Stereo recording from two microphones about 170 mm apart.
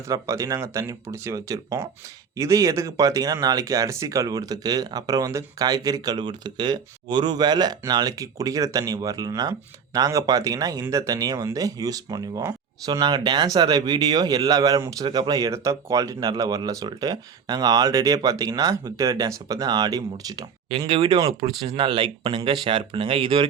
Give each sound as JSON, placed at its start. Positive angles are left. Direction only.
{"t": 0.1, "sound": "speech", "side_deg": -20}